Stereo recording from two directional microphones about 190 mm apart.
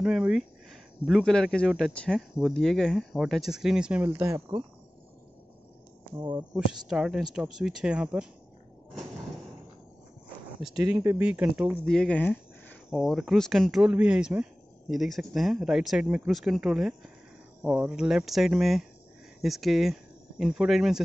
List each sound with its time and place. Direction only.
0.0 s speech: 5° right (ahead or behind)
6.1 s speech: 25° right (ahead or behind)
6.5 s speech: 5° right (ahead or behind)
10.8 s speech: 15° right (ahead or behind)
11.7 s speech: 5° left (ahead or behind)